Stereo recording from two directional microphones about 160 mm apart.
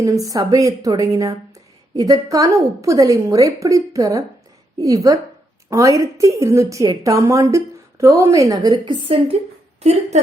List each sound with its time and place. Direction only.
0.0 s a woman's voice: 20° right (ahead or behind)
8.7 s a woman's voice: 35° right (ahead or behind)